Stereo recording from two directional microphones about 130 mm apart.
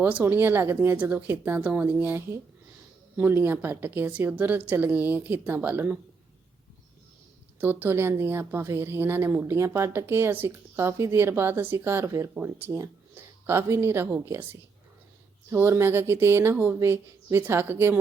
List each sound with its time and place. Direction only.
0.0 s a woman's voice: 15° right (ahead or behind)
7.6 s a woman's voice: 15° right (ahead or behind)